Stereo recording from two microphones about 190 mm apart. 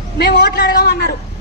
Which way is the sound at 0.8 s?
60° left (ahead or behind).